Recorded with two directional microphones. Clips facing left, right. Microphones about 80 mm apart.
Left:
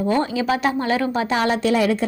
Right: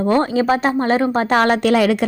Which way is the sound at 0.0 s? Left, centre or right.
Right.